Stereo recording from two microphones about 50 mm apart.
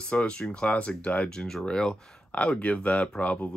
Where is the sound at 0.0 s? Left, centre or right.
Left.